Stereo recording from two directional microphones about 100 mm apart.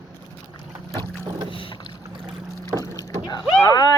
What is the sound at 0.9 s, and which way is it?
Boat, 50° right (ahead or behind).